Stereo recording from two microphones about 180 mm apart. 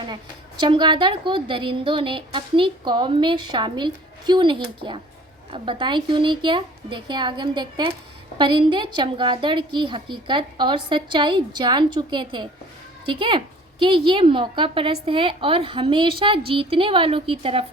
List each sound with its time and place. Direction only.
0.6 s a woman's voice: 25° right (ahead or behind)